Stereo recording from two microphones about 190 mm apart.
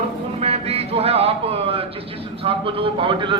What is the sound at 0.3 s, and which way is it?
Speech, 35° right (ahead or behind).